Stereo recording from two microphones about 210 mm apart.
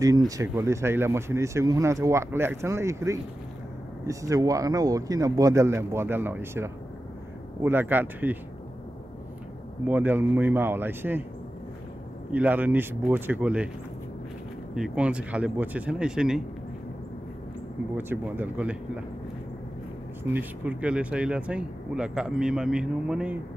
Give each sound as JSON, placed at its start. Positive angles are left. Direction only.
{"t": 0.4, "sound": "speech", "side_deg": -15}
{"t": 9.8, "sound": "speech", "side_deg": -10}
{"t": 12.3, "sound": "speech", "side_deg": -10}
{"t": 14.8, "sound": "speech", "side_deg": -5}
{"t": 17.9, "sound": "speech", "side_deg": -10}
{"t": 20.3, "sound": "speech", "side_deg": -5}